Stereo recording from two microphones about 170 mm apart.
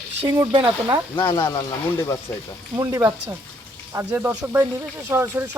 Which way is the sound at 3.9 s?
15° right (ahead or behind).